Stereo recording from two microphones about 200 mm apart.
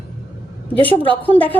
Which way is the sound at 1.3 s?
10° left (ahead or behind).